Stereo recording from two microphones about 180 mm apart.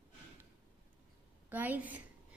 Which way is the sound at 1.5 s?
10° right (ahead or behind).